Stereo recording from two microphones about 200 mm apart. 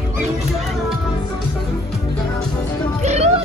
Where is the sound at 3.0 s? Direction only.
35° right (ahead or behind).